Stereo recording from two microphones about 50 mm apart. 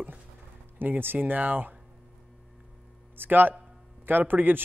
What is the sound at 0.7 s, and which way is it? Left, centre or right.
Speech, right.